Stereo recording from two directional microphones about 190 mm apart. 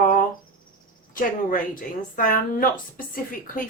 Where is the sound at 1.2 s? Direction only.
45° left (ahead or behind).